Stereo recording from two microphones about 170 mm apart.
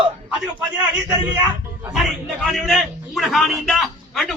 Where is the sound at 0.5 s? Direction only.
10° right (ahead or behind).